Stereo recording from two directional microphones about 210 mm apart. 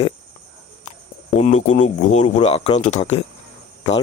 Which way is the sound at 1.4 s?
35° left (ahead or behind).